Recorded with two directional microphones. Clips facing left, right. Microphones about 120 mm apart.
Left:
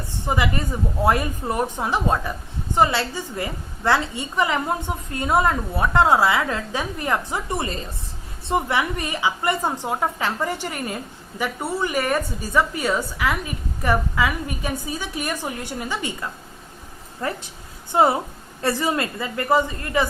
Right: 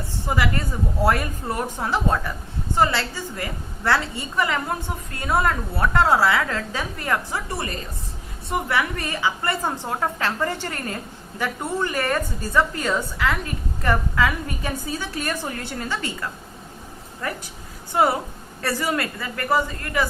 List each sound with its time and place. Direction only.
0.3 s a woman's voice: 20° left (ahead or behind)
17.2 s a woman's voice: 25° left (ahead or behind)